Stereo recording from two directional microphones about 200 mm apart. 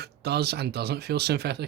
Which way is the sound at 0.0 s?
55° right (ahead or behind).